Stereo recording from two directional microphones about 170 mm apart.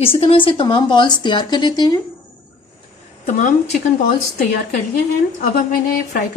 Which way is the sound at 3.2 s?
45° left (ahead or behind).